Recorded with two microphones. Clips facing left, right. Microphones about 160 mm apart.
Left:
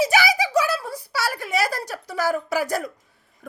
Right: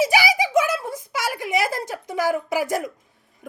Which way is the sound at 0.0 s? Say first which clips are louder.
Even; 15° right (ahead or behind).